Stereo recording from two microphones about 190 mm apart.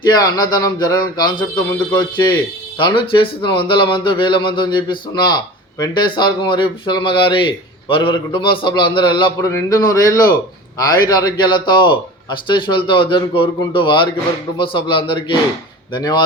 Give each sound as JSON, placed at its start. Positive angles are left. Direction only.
{"t": 0.1, "sound": "speech", "side_deg": 20}